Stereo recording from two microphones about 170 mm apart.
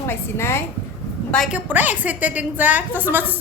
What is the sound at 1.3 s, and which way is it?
Speech, centre (ahead or behind).